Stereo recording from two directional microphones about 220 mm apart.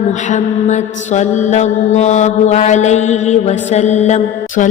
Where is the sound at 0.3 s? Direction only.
30° left (ahead or behind).